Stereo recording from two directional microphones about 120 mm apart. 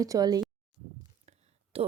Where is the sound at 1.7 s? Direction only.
55° right (ahead or behind).